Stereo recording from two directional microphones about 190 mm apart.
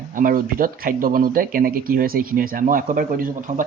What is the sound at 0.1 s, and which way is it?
Speech, 45° right (ahead or behind).